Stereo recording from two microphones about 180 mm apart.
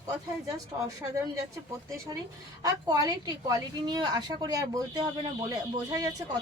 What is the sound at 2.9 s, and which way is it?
A woman's voice, 20° right (ahead or behind).